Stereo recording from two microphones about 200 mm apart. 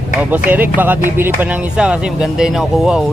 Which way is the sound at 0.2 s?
10° right (ahead or behind).